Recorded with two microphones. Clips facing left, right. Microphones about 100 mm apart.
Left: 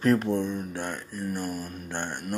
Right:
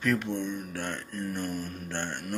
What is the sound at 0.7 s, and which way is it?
Speech, 15° left (ahead or behind).